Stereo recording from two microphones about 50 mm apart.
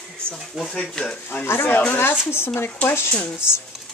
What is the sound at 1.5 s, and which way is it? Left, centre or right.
Speech, left.